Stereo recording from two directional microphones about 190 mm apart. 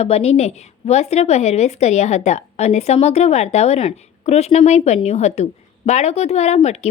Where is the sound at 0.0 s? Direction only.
30° left (ahead or behind).